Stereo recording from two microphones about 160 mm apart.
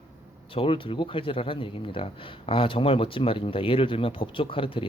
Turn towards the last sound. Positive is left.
turn(degrees=35)  # may be behind; listen again after turning